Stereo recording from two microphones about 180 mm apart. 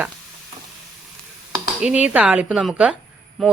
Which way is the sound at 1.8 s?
5° right (ahead or behind).